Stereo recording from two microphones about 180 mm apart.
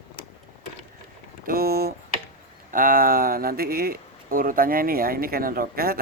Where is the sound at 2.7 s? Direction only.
50° right (ahead or behind).